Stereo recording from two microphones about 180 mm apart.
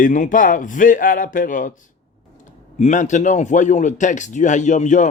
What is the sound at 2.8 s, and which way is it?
A man's voice, 40° left (ahead or behind).